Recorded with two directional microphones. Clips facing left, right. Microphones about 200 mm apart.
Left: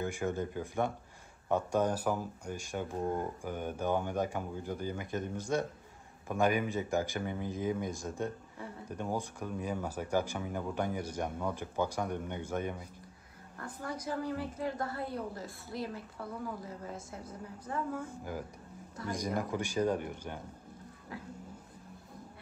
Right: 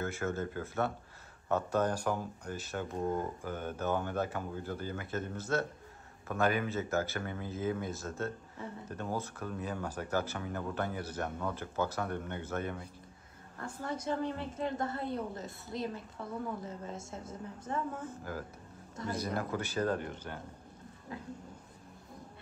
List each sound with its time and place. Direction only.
0.0 s speech: 15° left (ahead or behind)
13.7 s a woman's voice: 25° right (ahead or behind)
18.0 s speech: 15° left (ahead or behind)